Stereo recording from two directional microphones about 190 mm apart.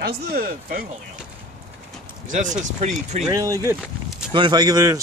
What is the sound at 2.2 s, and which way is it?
Speech, 40° right (ahead or behind).